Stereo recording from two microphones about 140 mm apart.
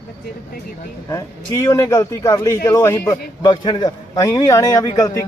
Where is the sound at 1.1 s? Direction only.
20° left (ahead or behind).